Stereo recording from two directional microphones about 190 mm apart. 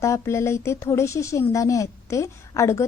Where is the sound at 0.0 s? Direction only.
15° left (ahead or behind).